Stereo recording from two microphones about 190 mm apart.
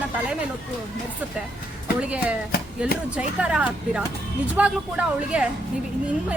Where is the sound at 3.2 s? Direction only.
5° right (ahead or behind).